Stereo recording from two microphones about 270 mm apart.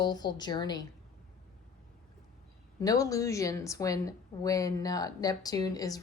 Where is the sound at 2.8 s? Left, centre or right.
Centre.